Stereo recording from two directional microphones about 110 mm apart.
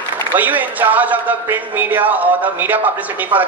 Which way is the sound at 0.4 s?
15° right (ahead or behind).